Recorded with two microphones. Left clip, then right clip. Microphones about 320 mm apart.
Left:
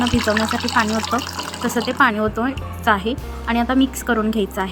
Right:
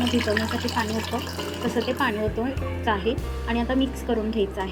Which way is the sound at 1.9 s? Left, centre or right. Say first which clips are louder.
Left 12 dB; left.